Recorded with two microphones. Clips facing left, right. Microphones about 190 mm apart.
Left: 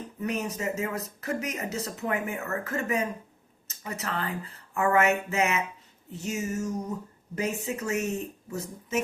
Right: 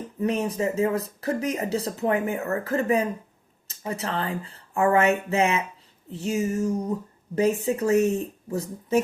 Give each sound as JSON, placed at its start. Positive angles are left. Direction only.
{"t": 0.2, "sound": "speech", "side_deg": -30}